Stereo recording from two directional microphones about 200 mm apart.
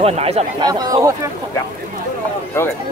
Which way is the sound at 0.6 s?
20° right (ahead or behind).